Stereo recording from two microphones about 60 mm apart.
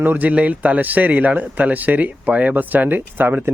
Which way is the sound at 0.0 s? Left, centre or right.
Right.